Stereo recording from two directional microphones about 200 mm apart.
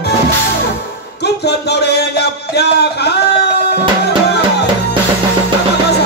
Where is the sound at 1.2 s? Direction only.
55° left (ahead or behind).